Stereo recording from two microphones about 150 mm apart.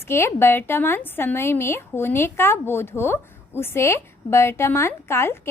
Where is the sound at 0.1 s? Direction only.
15° left (ahead or behind).